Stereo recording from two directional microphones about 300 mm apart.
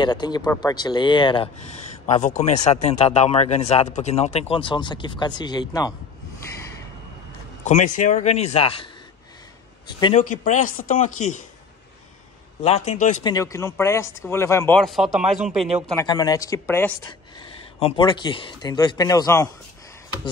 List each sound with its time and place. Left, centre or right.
0.0 s speech: centre
7.9 s speech: left
9.9 s speech: centre
12.6 s speech: left
13.3 s speech: centre
16.1 s speech: centre